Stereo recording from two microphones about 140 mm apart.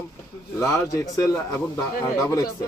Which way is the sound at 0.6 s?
20° left (ahead or behind).